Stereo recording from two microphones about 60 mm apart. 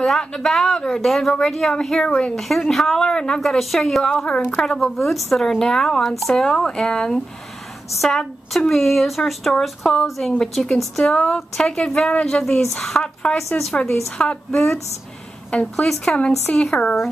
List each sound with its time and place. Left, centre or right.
0.0 s speech: centre
4.1 s a woman's voice: centre
16.5 s a woman's voice: left